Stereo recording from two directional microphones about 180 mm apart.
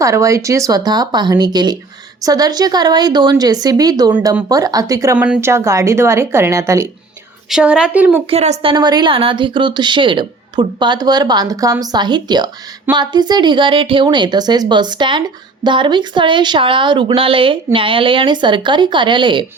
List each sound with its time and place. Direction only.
0.0 s speech: 15° right (ahead or behind)
5.1 s a woman's voice: 10° right (ahead or behind)
7.5 s a woman's voice: 5° right (ahead or behind)
8.3 s a woman's voice: 35° right (ahead or behind)
8.7 s speech: 25° right (ahead or behind)